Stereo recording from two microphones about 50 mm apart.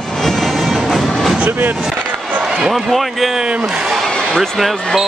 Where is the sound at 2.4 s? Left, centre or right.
Centre.